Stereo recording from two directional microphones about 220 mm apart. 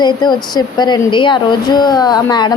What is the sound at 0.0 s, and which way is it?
Speech, 20° left (ahead or behind).